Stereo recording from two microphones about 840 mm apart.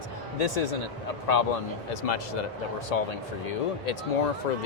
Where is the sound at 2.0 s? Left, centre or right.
Left.